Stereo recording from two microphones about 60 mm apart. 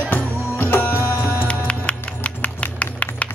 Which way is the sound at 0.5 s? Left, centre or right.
Left.